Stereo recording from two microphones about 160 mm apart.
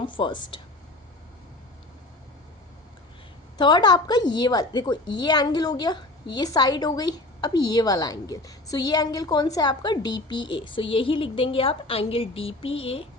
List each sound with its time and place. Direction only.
0.0 s speech: 30° left (ahead or behind)
3.6 s a woman's voice: 30° left (ahead or behind)